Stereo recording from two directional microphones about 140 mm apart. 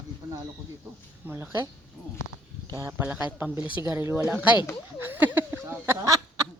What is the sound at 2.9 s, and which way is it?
Speech, 10° right (ahead or behind).